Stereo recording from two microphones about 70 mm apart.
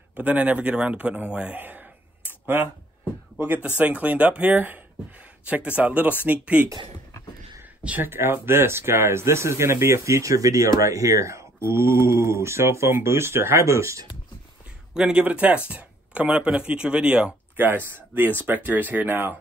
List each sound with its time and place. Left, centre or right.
0.1 s a man's voice: right
7.8 s speech: right
8.1 s speech: right
15.0 s speech: centre
17.6 s speech: right